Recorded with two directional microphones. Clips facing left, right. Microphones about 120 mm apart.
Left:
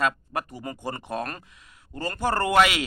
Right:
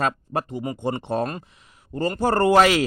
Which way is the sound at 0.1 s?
25° right (ahead or behind).